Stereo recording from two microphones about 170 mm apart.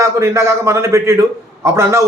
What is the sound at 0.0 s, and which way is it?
Speech, 15° right (ahead or behind).